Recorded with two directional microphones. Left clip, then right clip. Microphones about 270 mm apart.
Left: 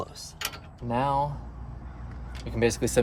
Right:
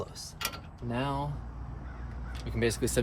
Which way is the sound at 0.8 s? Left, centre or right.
Left.